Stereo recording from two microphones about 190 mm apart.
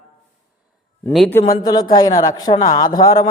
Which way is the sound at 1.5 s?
20° left (ahead or behind).